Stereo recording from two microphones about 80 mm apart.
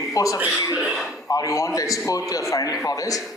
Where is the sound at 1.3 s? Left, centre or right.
Left.